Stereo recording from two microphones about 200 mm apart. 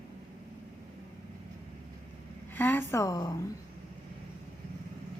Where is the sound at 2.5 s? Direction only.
10° left (ahead or behind).